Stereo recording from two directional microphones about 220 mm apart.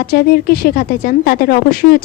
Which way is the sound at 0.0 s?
45° left (ahead or behind).